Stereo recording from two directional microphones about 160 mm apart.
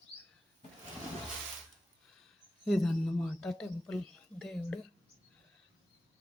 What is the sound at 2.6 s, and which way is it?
Speech, centre (ahead or behind).